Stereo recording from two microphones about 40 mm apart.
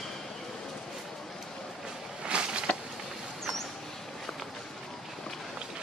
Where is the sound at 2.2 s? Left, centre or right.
Right.